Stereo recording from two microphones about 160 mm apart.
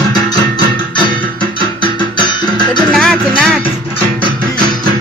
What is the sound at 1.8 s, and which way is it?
Music, 30° left (ahead or behind).